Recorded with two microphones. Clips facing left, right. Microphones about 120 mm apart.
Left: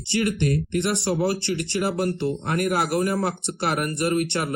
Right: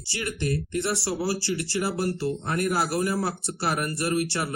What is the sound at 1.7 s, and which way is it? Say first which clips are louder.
Speech: left 3 dB; 20° left (ahead or behind).